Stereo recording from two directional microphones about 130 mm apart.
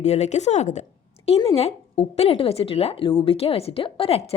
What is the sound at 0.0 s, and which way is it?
A woman's voice, 60° left (ahead or behind).